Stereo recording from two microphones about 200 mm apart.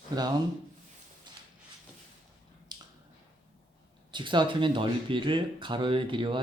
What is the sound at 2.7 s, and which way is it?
Finger snapping, 20° right (ahead or behind).